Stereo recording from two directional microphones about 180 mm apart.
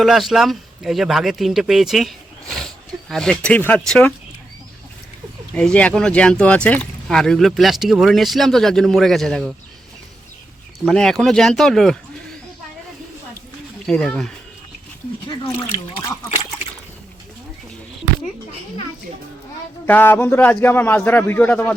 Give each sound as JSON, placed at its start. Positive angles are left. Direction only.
{"t": 0.0, "sound": "speech", "side_deg": 0}
{"t": 5.5, "sound": "speech", "side_deg": 5}
{"t": 10.8, "sound": "speech", "side_deg": 5}
{"t": 13.8, "sound": "speech", "side_deg": 5}
{"t": 15.3, "sound": "speech", "side_deg": 30}
{"t": 19.9, "sound": "a man's voice", "side_deg": 10}